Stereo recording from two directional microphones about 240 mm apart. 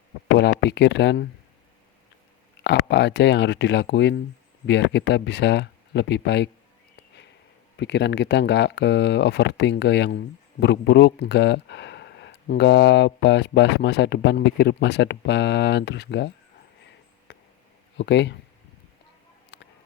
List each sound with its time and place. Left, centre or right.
0.3 s speech: left
2.6 s speech: left
7.8 s speech: left
17.3 s a sound: left
17.9 s speech: left
19.5 s a sound: left